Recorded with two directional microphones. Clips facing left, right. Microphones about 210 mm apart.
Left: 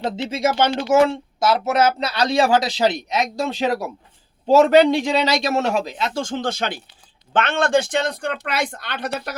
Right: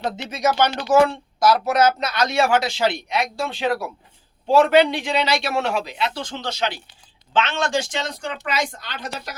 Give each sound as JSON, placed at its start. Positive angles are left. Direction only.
{"t": 0.0, "sound": "a man's voice", "side_deg": 25}